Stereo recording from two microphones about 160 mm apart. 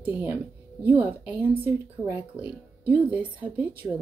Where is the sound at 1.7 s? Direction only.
15° right (ahead or behind).